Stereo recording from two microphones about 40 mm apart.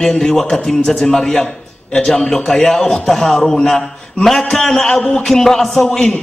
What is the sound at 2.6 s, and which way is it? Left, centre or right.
A man's voice, centre.